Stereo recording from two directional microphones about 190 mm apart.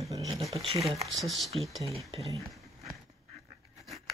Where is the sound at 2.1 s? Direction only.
25° right (ahead or behind).